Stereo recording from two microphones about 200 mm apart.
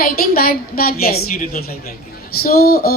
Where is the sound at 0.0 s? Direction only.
50° left (ahead or behind).